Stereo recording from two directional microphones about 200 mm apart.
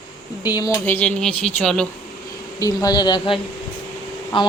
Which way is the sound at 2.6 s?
20° left (ahead or behind).